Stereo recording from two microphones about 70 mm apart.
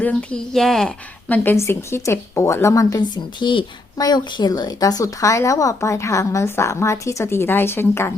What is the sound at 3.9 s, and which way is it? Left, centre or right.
Speech, left.